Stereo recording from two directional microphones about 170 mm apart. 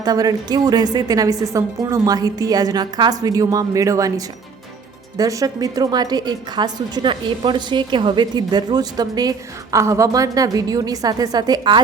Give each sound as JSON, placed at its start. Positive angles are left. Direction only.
{"t": 0.0, "sound": "a woman's voice", "side_deg": -20}
{"t": 5.1, "sound": "a woman's voice", "side_deg": -20}